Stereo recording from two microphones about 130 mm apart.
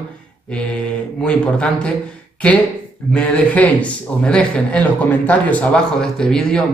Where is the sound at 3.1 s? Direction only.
10° left (ahead or behind).